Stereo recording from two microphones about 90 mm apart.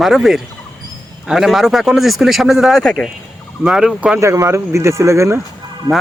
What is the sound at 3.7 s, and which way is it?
Speech, 10° right (ahead or behind).